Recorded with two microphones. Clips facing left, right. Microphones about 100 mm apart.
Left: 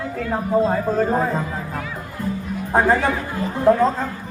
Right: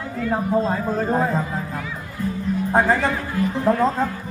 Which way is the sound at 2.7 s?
5° left (ahead or behind).